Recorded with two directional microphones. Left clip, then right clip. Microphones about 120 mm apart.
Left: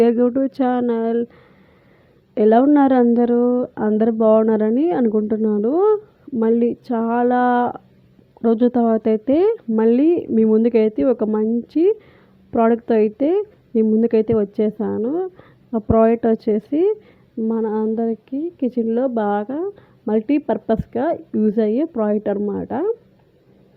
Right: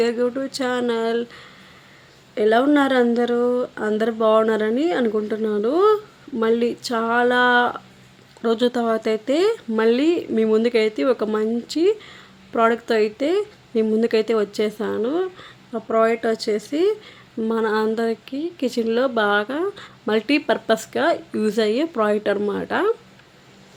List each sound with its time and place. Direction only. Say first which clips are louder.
0.0 s speech: left 5 dB; 70° left (ahead or behind)
0.3 s speech: left 5 dB; 45° left (ahead or behind)
0.5 s speech: left 3 dB; 65° left (ahead or behind); by 1.5 s 50° left (ahead or behind)
2.3 s speech: left 3 dB; 70° left (ahead or behind)
3.6 s speech: left 2 dB; 40° left (ahead or behind)
3.9 s speech: left 2 dB; 55° left (ahead or behind)
17.5 s speech: right 1 dB; 40° left (ahead or behind)